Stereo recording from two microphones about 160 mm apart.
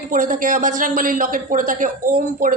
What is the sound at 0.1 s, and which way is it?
A woman's voice, 55° right (ahead or behind).